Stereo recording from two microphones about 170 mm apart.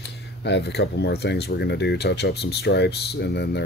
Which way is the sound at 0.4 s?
85° left.